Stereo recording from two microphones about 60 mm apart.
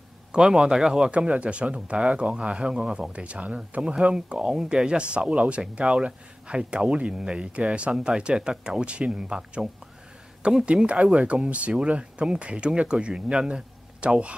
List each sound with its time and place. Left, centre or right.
0.3 s speech: centre